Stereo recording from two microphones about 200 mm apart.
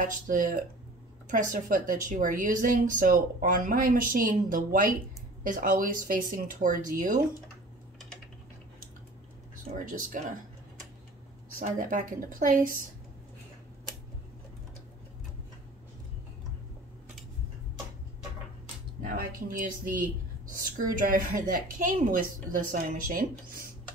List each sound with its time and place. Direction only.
0.0 s a woman's voice: 40° right (ahead or behind)
9.8 s speech: 40° right (ahead or behind)
11.6 s a woman's voice: 40° right (ahead or behind)
19.1 s a woman's voice: 45° right (ahead or behind)